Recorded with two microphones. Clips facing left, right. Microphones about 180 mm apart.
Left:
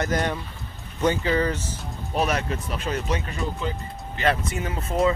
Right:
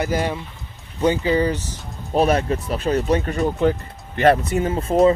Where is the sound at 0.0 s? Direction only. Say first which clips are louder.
Right 3 dB; 5° right (ahead or behind).